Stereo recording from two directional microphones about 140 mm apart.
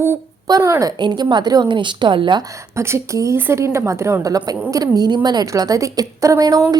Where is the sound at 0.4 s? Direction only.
25° right (ahead or behind).